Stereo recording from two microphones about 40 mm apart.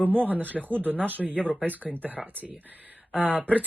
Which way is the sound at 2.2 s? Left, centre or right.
Centre.